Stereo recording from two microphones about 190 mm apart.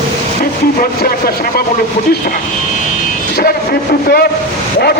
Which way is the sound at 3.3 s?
55° left (ahead or behind).